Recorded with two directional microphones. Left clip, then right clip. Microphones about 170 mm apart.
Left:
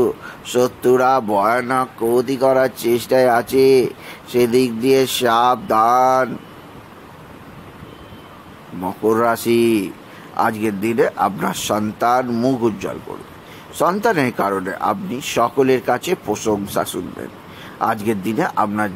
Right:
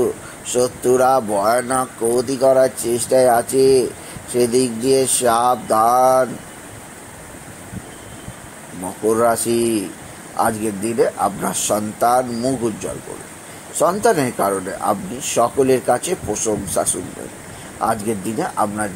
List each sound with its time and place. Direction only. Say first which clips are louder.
0.0 s speech: left 2 dB; 20° left (ahead or behind)
8.8 s speech: even; 25° left (ahead or behind)
13.7 s speech: right 1 dB; 20° left (ahead or behind)